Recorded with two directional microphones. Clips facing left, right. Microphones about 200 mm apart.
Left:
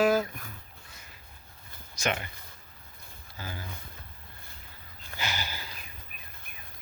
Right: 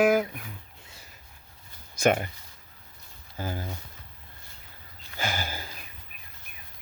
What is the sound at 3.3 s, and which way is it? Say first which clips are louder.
Speech: right 7 dB; 50° right (ahead or behind).